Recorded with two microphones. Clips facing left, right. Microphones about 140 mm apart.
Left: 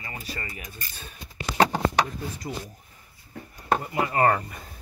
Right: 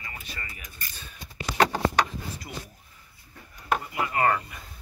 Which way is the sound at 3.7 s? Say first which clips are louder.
Left 3 dB; 35° left (ahead or behind).